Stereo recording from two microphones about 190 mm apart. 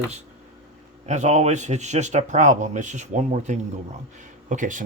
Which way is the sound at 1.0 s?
40° right (ahead or behind).